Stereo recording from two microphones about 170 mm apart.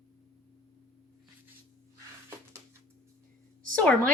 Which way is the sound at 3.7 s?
5° left (ahead or behind).